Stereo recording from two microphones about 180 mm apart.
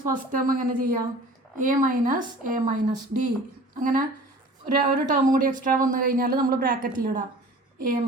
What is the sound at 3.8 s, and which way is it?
A woman's voice, 45° right (ahead or behind).